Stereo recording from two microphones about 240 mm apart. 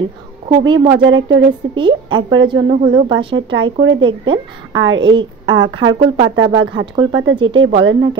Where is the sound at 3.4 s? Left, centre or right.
Right.